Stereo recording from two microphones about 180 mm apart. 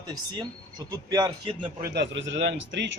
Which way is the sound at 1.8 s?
70° right (ahead or behind).